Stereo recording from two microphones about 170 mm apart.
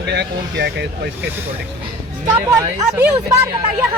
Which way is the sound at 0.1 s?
80° right.